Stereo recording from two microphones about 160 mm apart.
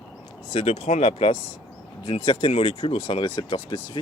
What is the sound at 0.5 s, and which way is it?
Speech, 45° left (ahead or behind).